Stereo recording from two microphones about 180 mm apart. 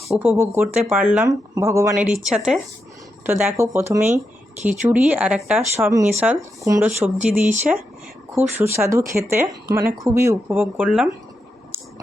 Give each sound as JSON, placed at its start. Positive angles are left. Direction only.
{"t": 0.0, "sound": "speech", "side_deg": -5}
{"t": 8.4, "sound": "speech", "side_deg": -10}